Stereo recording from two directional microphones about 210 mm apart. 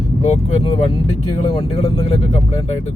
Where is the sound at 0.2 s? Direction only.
30° left (ahead or behind).